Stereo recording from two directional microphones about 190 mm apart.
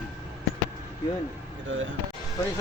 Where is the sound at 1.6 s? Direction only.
90° right.